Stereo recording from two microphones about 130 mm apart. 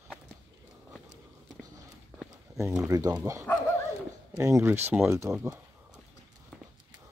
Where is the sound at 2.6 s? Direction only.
25° right (ahead or behind).